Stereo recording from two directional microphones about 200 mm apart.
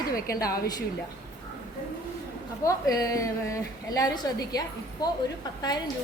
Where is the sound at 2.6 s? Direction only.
15° left (ahead or behind).